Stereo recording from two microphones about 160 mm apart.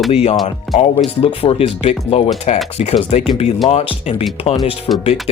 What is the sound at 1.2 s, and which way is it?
Speech, 35° left (ahead or behind).